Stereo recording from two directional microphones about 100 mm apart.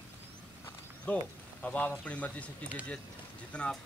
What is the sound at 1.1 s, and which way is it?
Speech, 15° left (ahead or behind).